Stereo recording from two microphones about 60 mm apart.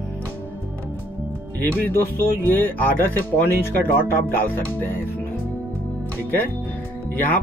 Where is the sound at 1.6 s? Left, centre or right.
Left.